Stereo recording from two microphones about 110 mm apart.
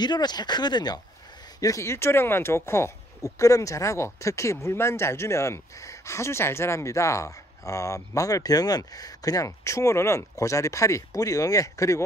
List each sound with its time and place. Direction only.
0.0 s speech: 40° left (ahead or behind)
1.6 s speech: 30° left (ahead or behind)